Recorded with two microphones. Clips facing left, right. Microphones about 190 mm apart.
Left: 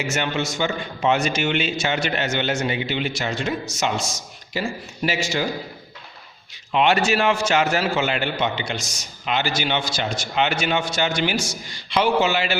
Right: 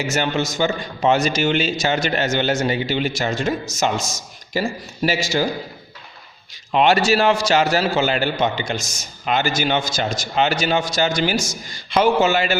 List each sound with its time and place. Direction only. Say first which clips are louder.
0.1 s a man's voice: right 3 dB; 40° right (ahead or behind)
6.7 s a man's voice: right 3 dB; 40° right (ahead or behind)